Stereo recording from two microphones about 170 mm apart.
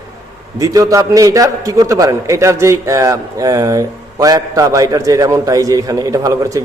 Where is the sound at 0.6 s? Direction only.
20° right (ahead or behind).